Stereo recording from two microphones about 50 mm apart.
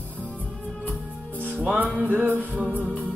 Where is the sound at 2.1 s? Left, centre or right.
Right.